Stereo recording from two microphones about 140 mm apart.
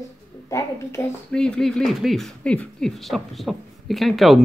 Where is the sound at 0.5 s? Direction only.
20° left (ahead or behind).